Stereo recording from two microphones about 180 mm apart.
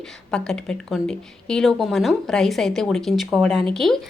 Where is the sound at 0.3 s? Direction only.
5° left (ahead or behind).